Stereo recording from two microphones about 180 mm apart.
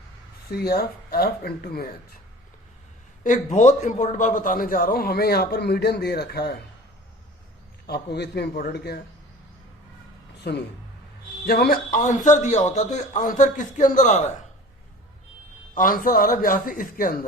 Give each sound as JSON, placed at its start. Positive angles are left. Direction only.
{"t": 0.5, "sound": "a man's voice", "side_deg": 60}
{"t": 3.2, "sound": "a man's voice", "side_deg": 45}
{"t": 7.9, "sound": "a man's voice", "side_deg": 65}
{"t": 10.5, "sound": "a man's voice", "side_deg": 65}
{"t": 15.7, "sound": "speech", "side_deg": 50}